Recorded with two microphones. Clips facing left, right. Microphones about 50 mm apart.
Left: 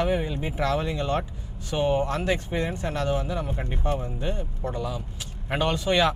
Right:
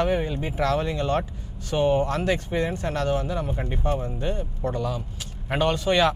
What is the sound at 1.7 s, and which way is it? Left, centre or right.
Speech, centre.